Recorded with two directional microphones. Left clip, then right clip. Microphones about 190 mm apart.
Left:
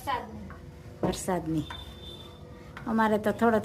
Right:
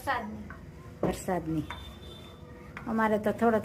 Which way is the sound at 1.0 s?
15° left (ahead or behind).